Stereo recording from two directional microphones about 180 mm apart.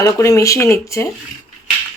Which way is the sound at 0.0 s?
15° left (ahead or behind).